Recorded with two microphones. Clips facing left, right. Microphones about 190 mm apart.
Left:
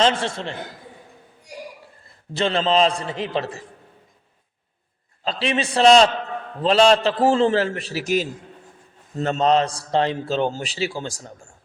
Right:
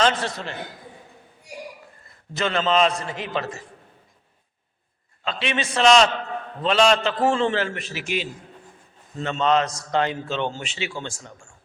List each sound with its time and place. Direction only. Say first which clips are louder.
0.0 s a man's voice: left 2 dB; 30° left (ahead or behind)
2.3 s a man's voice: left 2 dB; 30° left (ahead or behind)
5.2 s a man's voice: left 3 dB; 35° left (ahead or behind)